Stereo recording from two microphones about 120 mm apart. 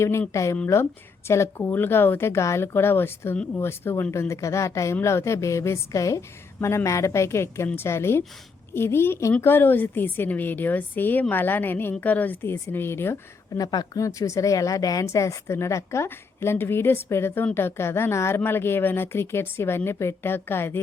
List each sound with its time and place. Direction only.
0.0 s a woman's voice: 20° left (ahead or behind)
13.6 s a woman's voice: 35° left (ahead or behind)